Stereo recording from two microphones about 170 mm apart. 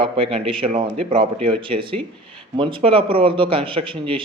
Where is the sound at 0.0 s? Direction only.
35° right (ahead or behind).